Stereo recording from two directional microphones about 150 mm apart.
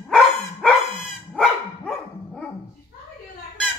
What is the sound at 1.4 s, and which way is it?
Dog, 5° left (ahead or behind).